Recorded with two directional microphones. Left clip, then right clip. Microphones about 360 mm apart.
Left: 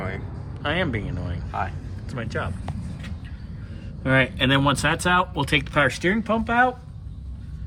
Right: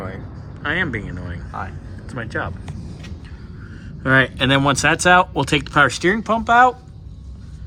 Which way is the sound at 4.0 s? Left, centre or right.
Centre.